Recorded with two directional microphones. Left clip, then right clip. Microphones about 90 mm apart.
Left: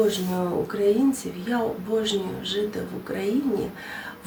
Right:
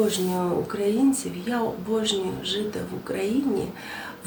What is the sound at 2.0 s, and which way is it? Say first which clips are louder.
A woman's voice: even; 30° right (ahead or behind).